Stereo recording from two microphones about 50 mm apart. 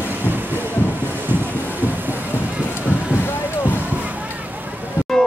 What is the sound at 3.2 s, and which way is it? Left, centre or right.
Boat, left.